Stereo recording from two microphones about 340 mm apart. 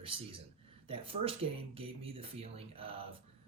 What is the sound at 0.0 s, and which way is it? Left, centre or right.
Speech, centre.